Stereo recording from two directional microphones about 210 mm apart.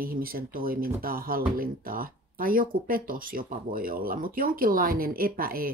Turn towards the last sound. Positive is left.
turn(degrees=-45)  # may be behind; listen again after turning